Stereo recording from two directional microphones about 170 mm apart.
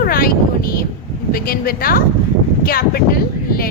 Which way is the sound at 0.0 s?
60° left (ahead or behind).